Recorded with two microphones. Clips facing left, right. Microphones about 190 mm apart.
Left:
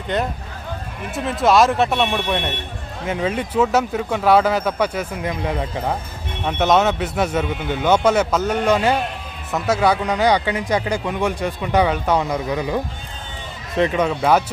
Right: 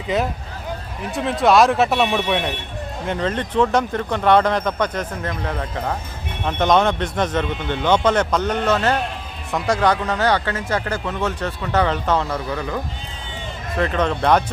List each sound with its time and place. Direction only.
0.1 s speech: centre (ahead or behind)